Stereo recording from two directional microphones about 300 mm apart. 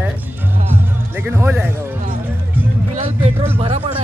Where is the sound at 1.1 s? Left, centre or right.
Centre.